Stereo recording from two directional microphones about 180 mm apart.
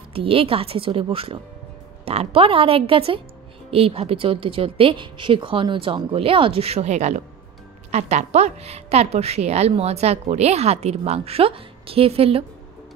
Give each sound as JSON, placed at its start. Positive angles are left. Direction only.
{"t": 0.1, "sound": "a woman's voice", "side_deg": -30}